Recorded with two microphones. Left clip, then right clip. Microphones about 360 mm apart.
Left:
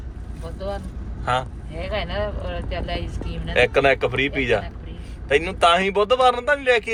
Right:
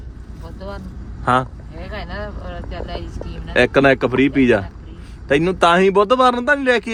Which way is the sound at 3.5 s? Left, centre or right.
Right.